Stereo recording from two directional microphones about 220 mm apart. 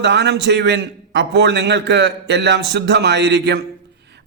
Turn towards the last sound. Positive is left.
turn(degrees=-50)  # may be behind; listen again after turning